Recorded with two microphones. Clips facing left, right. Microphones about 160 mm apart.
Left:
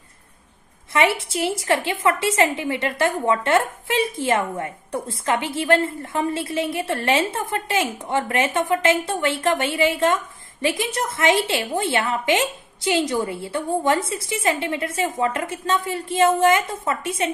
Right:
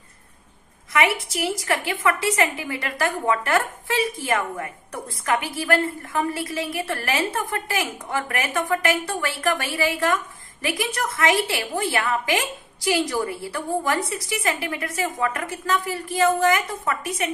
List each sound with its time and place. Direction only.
0.9 s a woman's voice: 30° left (ahead or behind)